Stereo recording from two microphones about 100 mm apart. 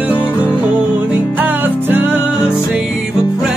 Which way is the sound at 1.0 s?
15° right (ahead or behind).